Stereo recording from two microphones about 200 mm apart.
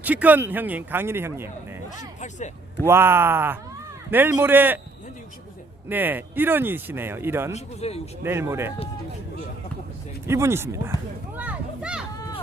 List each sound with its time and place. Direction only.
0.0 s speech: 10° right (ahead or behind)
2.8 s speech: 10° right (ahead or behind)
5.9 s speech: 10° right (ahead or behind)
7.5 s a man's voice: 30° left (ahead or behind)
8.2 s speech: 10° right (ahead or behind)
10.2 s speech: 15° right (ahead or behind)
11.3 s a sound: 5° right (ahead or behind)